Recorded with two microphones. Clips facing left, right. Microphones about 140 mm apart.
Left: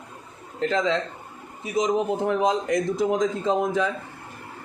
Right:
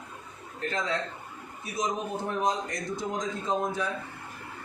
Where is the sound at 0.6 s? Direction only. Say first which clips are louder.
Left 8 dB; 90° left.